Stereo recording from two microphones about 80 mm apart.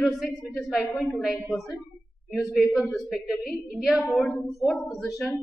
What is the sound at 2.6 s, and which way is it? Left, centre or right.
A woman's voice, centre.